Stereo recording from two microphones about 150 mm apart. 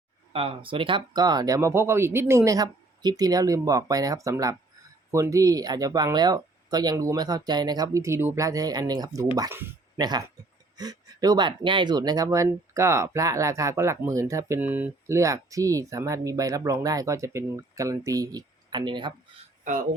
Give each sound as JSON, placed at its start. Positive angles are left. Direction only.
{"t": 0.3, "sound": "speech", "side_deg": -35}